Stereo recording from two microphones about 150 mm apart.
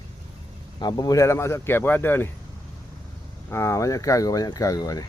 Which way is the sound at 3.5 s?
20° left (ahead or behind).